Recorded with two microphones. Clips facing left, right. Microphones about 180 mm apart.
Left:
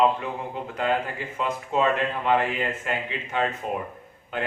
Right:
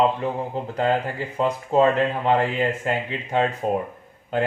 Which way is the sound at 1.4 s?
35° right (ahead or behind).